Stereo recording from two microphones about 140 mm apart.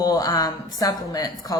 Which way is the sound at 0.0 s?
25° left (ahead or behind).